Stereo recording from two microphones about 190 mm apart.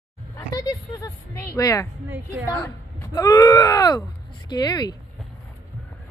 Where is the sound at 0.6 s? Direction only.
15° left (ahead or behind).